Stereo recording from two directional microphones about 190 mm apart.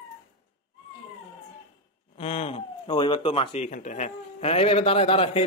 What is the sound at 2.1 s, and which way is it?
Speech, 30° left (ahead or behind).